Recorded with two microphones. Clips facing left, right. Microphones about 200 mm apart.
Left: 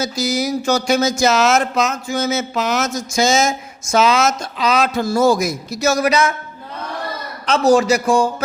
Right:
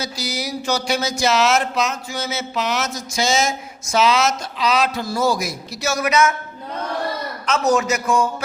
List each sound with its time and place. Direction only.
0.0 s speech: 45° left (ahead or behind)
7.4 s a man's voice: 30° left (ahead or behind)